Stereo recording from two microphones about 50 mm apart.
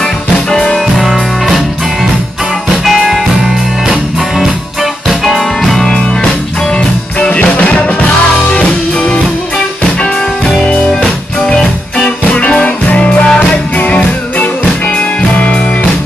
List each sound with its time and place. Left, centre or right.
0.5 s music: centre
0.9 s music: centre
2.8 s music: centre
5.2 s music: centre
7.2 s music: left
11.4 s music: centre
12.3 s music: left